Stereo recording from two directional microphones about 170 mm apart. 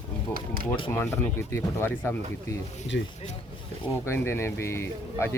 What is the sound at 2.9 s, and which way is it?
Speech, 75° left (ahead or behind).